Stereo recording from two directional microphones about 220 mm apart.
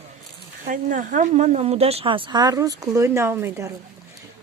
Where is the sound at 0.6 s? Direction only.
35° right (ahead or behind); by 3.7 s 10° right (ahead or behind).